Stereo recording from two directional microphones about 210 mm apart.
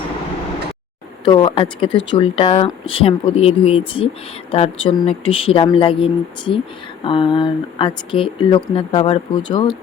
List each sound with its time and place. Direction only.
1.2 s speech: 20° left (ahead or behind)
1.9 s speech: 60° left (ahead or behind)
2.1 s speech: 30° left (ahead or behind)